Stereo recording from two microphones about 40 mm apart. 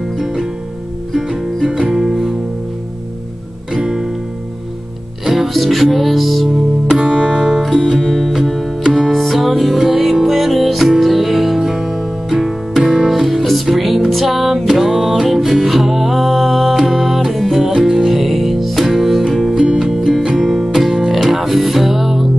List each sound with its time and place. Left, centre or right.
0.2 s music: centre
3.7 s music: centre
5.2 s music: centre
6.9 s music: right
8.0 s music: centre